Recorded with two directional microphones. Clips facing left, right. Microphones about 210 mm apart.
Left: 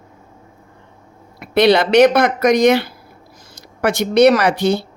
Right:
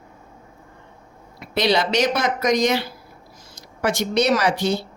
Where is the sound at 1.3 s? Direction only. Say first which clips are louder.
Left 7 dB; 60° left (ahead or behind).